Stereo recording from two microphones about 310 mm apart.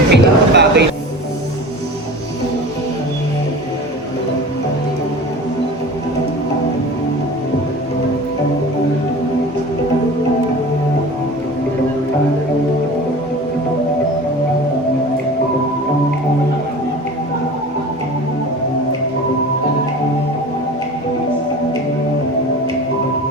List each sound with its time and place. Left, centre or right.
0.1 s speech: right